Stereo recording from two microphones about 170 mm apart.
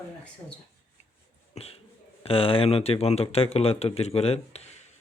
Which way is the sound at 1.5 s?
40° left (ahead or behind).